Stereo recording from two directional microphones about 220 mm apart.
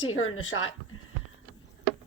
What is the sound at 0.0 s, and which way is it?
Speech, 65° left (ahead or behind).